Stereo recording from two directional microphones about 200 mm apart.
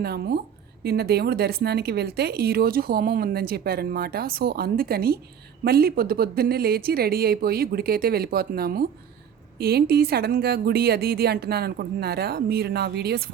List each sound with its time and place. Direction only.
0.0 s speech: 55° right (ahead or behind)